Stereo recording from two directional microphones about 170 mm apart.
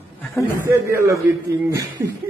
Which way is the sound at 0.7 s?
15° right (ahead or behind).